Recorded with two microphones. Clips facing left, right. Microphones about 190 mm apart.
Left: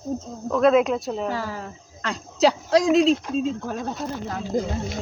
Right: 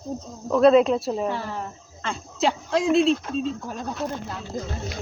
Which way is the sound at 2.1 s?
40° left (ahead or behind).